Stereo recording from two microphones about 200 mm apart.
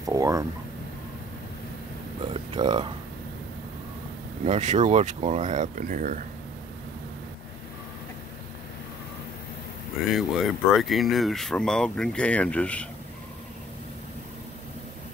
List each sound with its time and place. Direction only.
0.0 s a sound: 15° right (ahead or behind)
2.5 s speech: 20° right (ahead or behind)
4.5 s speech: 35° right (ahead or behind)
10.1 s speech: centre (ahead or behind)